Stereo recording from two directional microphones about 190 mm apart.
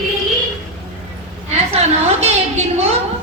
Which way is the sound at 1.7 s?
35° right (ahead or behind).